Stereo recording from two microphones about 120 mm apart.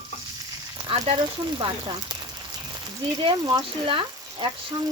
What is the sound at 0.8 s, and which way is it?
Speech, 55° right (ahead or behind).